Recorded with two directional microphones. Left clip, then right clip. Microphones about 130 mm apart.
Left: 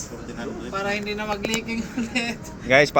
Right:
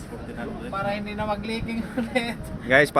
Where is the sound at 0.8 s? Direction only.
5° right (ahead or behind).